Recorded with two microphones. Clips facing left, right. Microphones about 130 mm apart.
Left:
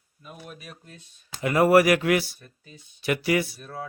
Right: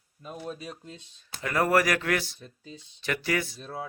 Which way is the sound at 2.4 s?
25° right (ahead or behind).